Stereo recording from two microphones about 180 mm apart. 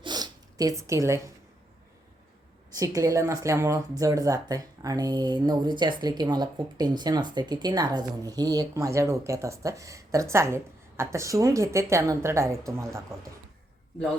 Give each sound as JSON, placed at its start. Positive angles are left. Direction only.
{"t": 0.0, "sound": "zipper", "side_deg": -20}
{"t": 2.7, "sound": "speech", "side_deg": -20}